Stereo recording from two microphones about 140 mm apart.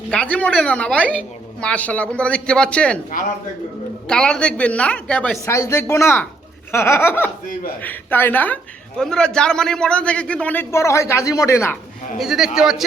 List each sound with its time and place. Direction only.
0.1 s a man's voice: 10° left (ahead or behind)
3.1 s speech: 75° left (ahead or behind)
4.1 s a man's voice: 5° left (ahead or behind)
12.1 s a man's voice: centre (ahead or behind)